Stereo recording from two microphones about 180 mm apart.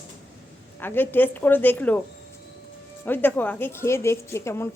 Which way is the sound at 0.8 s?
10° left (ahead or behind).